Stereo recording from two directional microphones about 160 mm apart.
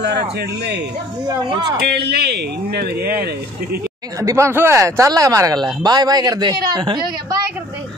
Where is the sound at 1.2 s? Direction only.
30° right (ahead or behind).